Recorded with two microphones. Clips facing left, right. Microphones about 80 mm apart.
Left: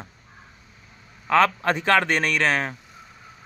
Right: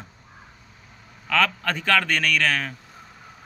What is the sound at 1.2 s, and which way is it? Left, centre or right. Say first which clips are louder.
Speech: left 4 dB; left.